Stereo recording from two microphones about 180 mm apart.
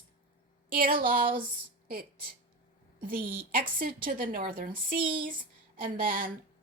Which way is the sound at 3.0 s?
55° right (ahead or behind).